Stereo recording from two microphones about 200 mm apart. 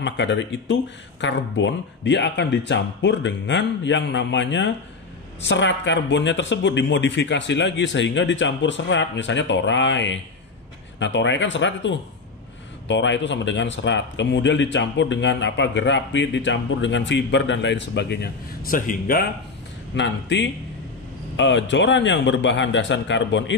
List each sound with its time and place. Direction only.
0.0 s speech: 65° left (ahead or behind); by 19.2 s 45° left (ahead or behind)
20.0 s speech: 60° left (ahead or behind)